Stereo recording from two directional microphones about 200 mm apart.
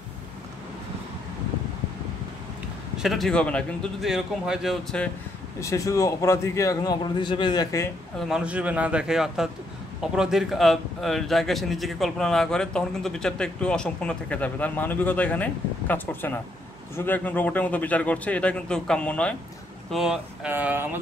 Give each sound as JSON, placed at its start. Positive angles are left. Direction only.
{"t": 3.0, "sound": "a man's voice", "side_deg": 0}
{"t": 5.6, "sound": "a man's voice", "side_deg": 15}
{"t": 8.2, "sound": "a man's voice", "side_deg": -5}